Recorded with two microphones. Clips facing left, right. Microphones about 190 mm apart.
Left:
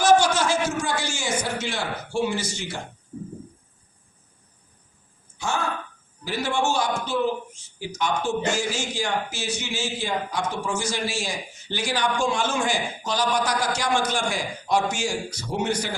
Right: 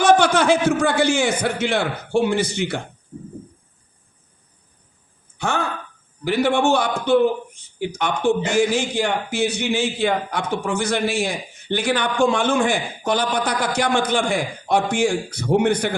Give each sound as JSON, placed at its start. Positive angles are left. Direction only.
{"t": 0.0, "sound": "a man's voice", "side_deg": -60}
{"t": 5.4, "sound": "a man's voice", "side_deg": -60}